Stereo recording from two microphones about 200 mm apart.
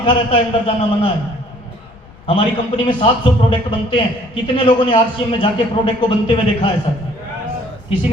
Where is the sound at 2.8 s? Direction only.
25° left (ahead or behind).